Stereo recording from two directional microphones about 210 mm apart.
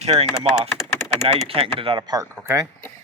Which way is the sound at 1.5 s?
25° right (ahead or behind).